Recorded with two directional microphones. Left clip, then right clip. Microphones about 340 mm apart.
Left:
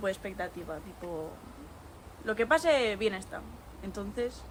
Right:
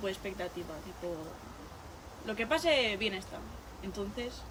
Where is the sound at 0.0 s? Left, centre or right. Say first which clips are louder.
Left 4 dB; centre.